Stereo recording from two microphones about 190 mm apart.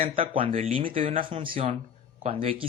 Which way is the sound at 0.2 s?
30° right (ahead or behind).